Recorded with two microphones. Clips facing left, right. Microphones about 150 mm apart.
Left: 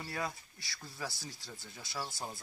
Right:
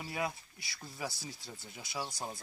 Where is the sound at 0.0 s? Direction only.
15° right (ahead or behind).